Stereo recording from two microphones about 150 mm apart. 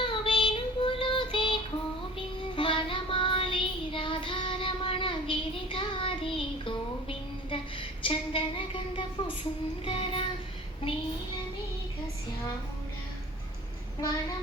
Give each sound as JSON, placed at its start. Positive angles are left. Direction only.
{"t": 0.0, "sound": "child singing", "side_deg": 30}
{"t": 2.6, "sound": "child singing", "side_deg": 35}
{"t": 9.8, "sound": "music", "side_deg": 40}